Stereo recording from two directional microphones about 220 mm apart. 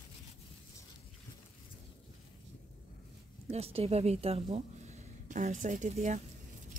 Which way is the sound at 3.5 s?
25° right (ahead or behind).